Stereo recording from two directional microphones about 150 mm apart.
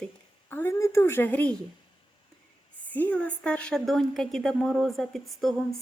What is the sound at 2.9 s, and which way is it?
A woman's voice, 10° left (ahead or behind).